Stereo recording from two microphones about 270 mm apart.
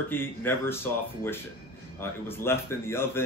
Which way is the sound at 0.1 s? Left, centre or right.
Centre.